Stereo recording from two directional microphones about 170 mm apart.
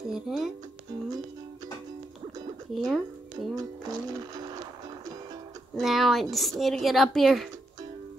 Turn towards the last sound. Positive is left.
turn(degrees=0)  # may be behind; listen again after turning